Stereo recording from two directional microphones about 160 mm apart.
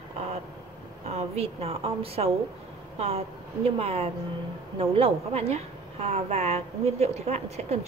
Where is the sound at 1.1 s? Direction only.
40° right (ahead or behind).